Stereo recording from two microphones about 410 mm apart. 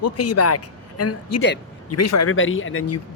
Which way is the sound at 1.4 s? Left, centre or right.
Left.